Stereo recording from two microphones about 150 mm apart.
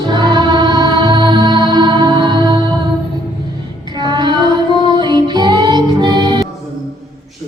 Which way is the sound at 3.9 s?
30° right (ahead or behind).